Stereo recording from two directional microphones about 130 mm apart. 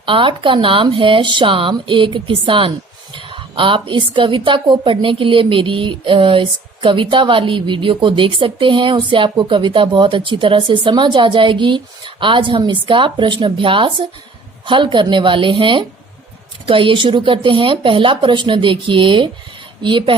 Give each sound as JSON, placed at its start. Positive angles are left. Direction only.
{"t": 0.0, "sound": "a woman's voice", "side_deg": -40}